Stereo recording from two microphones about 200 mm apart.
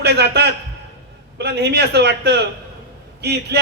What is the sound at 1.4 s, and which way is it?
A man's voice, 55° right (ahead or behind).